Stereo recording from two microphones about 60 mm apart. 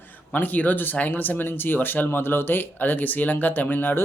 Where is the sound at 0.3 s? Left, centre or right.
Left.